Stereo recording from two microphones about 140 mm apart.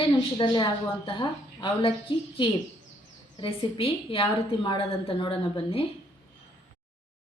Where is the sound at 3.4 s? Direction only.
40° left (ahead or behind).